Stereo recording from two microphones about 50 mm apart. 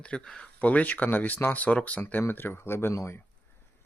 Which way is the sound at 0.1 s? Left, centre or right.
Left.